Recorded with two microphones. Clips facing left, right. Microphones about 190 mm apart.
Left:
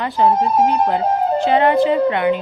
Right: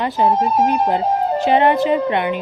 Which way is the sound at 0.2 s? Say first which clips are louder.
Left 2 dB; 20° right (ahead or behind).